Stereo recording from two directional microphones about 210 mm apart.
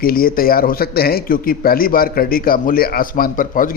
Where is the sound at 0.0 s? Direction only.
45° left (ahead or behind).